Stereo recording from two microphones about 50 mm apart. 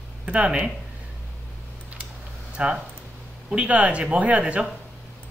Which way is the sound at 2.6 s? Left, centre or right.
Right.